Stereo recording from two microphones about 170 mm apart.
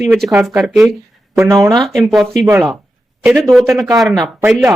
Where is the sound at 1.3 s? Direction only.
15° right (ahead or behind).